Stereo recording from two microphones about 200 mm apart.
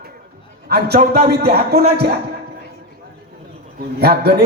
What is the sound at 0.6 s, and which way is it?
A man's voice, 55° right (ahead or behind).